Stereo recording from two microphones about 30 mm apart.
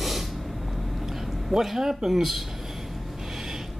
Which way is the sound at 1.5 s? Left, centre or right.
Centre.